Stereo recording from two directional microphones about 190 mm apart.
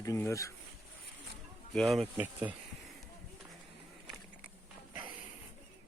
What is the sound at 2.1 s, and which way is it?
Speech, 10° right (ahead or behind).